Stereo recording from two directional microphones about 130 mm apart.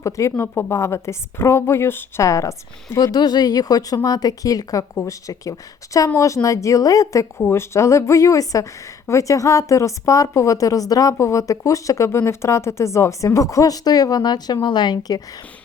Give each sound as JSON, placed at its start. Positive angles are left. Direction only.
{"t": 0.0, "sound": "a woman's voice", "side_deg": 25}